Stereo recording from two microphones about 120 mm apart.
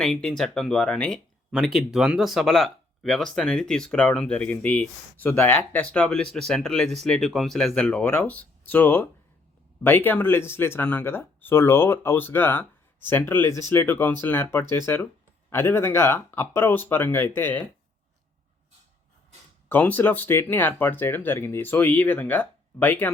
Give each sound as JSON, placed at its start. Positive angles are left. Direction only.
{"t": 0.0, "sound": "speech", "side_deg": 5}
{"t": 7.9, "sound": "speech", "side_deg": 15}
{"t": 19.6, "sound": "speech", "side_deg": 15}